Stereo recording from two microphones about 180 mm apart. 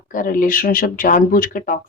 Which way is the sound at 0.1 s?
50° left (ahead or behind).